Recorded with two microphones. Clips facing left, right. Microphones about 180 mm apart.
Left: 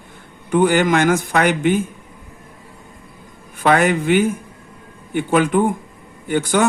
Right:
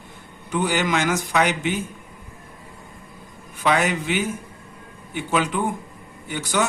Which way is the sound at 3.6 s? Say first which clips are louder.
Left 6 dB; 55° left (ahead or behind).